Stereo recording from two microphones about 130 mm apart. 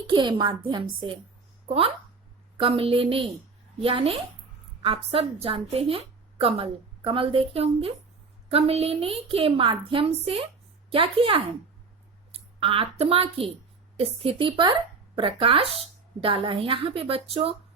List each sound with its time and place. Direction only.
0.1 s a woman's voice: 35° right (ahead or behind)
1.6 s a woman's voice: 50° right (ahead or behind)